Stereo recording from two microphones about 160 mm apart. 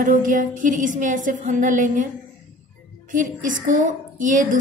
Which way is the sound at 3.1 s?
55° right (ahead or behind).